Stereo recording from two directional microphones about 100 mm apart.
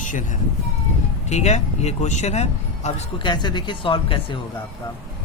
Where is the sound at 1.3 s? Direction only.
90° left.